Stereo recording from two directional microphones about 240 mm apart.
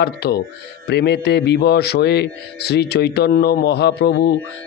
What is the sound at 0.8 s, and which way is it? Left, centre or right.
Speech, left.